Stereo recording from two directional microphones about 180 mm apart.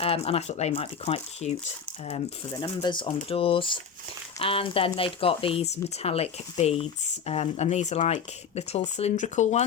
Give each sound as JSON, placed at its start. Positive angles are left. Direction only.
{"t": 0.0, "sound": "speech", "side_deg": 35}